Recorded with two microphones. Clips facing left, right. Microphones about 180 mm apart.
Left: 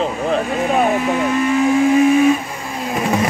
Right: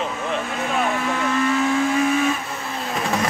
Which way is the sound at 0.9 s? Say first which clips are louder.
Left 5 dB; 15° left (ahead or behind).